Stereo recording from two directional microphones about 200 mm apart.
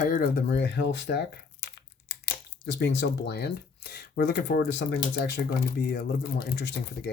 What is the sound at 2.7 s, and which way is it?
Speech, 60° left (ahead or behind).